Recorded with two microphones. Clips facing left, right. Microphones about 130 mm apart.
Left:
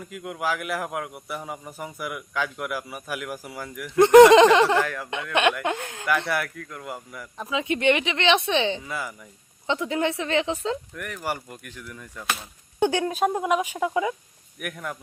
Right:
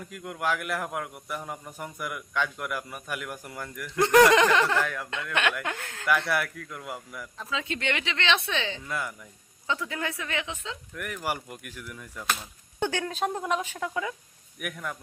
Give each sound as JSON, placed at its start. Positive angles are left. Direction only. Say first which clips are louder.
{"t": 0.0, "sound": "a man's voice", "louder": "left 2 dB", "side_deg": 5}
{"t": 3.8, "sound": "speech", "louder": "left 7 dB", "side_deg": 20}
{"t": 4.8, "sound": "a man's voice", "louder": "left 3 dB", "side_deg": 0}
{"t": 5.1, "sound": "speech", "louder": "left 7 dB", "side_deg": 20}
{"t": 6.1, "sound": "a man's voice", "louder": "left 1 dB", "side_deg": 0}
{"t": 7.3, "sound": "speech", "louder": "left 7 dB", "side_deg": 15}
{"t": 8.8, "sound": "a man's voice", "louder": "left 1 dB", "side_deg": 5}
{"t": 9.6, "sound": "speech", "louder": "left 7 dB", "side_deg": 20}
{"t": 10.9, "sound": "a man's voice", "louder": "left 1 dB", "side_deg": -5}
{"t": 12.3, "sound": "speech", "louder": "left 1 dB", "side_deg": 10}
{"t": 14.6, "sound": "a man's voice", "louder": "left 2 dB", "side_deg": 0}